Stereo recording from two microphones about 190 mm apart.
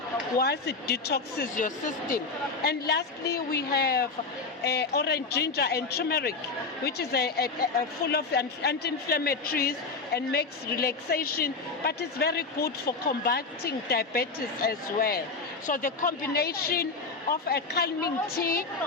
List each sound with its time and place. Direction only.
0.3 s speech: 60° left (ahead or behind)
2.6 s a woman's voice: 60° left (ahead or behind)